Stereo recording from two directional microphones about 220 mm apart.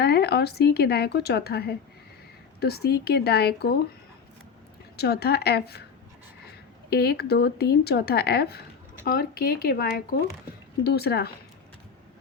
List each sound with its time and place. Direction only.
0.0 s speech: 50° left (ahead or behind)
4.9 s speech: 45° left (ahead or behind)
6.9 s speech: 45° left (ahead or behind)